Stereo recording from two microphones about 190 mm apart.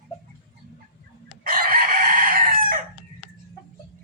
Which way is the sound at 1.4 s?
50° right (ahead or behind).